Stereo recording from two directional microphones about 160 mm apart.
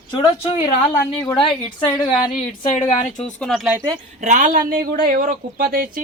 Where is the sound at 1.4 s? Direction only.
30° left (ahead or behind).